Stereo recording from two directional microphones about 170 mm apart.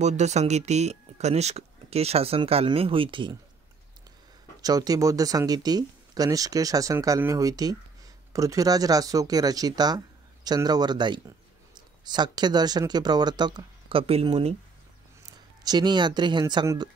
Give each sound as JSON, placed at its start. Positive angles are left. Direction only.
{"t": 0.0, "sound": "speech", "side_deg": -40}
{"t": 4.6, "sound": "speech", "side_deg": -20}
{"t": 15.6, "sound": "speech", "side_deg": -25}